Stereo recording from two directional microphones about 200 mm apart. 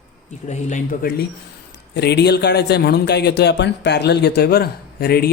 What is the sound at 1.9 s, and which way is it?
A man's voice, 55° left (ahead or behind).